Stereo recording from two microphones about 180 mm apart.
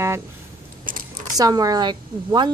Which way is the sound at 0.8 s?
50° right (ahead or behind).